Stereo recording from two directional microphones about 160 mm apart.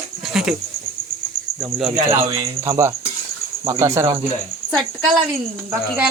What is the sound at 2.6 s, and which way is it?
Speech, 20° right (ahead or behind).